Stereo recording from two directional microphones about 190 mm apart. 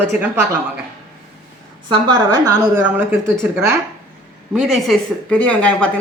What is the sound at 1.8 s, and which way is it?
A woman's voice, 20° right (ahead or behind).